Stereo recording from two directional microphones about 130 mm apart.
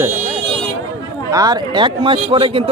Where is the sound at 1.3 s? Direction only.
30° right (ahead or behind).